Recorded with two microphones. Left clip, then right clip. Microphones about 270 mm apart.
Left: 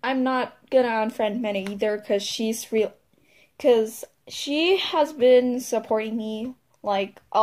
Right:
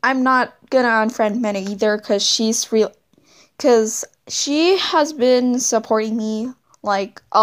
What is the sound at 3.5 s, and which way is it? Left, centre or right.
Speech, right.